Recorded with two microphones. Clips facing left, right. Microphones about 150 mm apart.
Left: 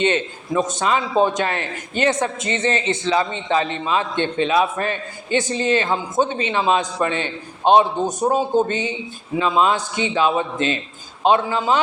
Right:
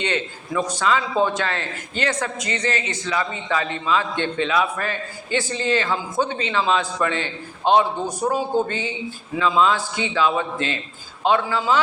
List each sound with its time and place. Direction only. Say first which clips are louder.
0.0 s a man's voice: left 5 dB; 20° left (ahead or behind)